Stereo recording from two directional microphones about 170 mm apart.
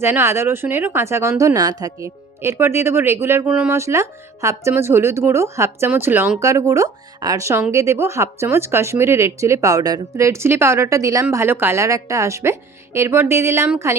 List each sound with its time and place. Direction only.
0.0 s speech: 15° right (ahead or behind)